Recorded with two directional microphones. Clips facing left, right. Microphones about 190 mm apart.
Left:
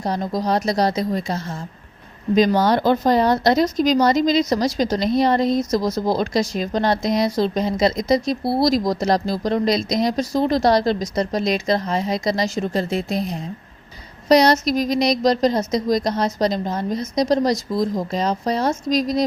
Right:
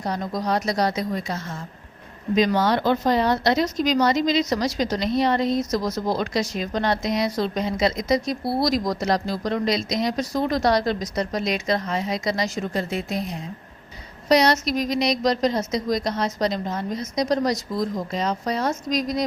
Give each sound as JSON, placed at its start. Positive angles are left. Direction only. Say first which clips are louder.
{"t": 0.0, "sound": "speech", "louder": "left 4 dB", "side_deg": 30}